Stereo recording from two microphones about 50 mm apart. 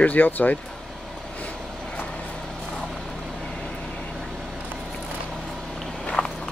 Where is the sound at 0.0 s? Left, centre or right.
Left.